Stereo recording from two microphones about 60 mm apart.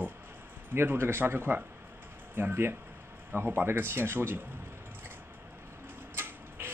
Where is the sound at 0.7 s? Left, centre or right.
Right.